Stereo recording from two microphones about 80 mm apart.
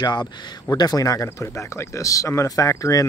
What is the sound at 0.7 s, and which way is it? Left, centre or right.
Speech, left.